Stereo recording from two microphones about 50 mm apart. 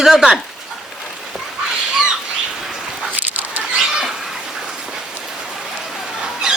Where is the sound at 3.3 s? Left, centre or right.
Right.